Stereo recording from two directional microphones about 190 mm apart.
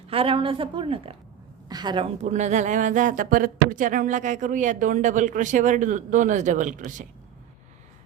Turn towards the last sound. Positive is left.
turn(degrees=-40)  # may be behind; listen again after turning